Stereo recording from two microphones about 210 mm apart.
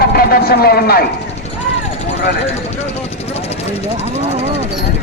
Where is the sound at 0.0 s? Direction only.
45° left (ahead or behind).